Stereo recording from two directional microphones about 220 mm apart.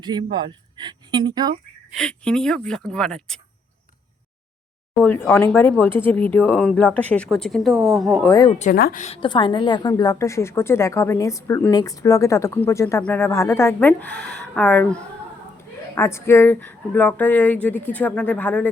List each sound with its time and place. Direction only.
0.0 s speech: 20° right (ahead or behind)
1.9 s speech: 5° left (ahead or behind)
5.0 s a woman's voice: 10° left (ahead or behind)
8.3 s a woman's voice: 20° left (ahead or behind)
8.5 s a woman's voice: 40° left (ahead or behind); by 18.7 s 5° left (ahead or behind)